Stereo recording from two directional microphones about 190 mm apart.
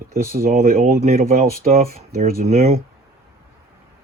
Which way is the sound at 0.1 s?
50° right (ahead or behind).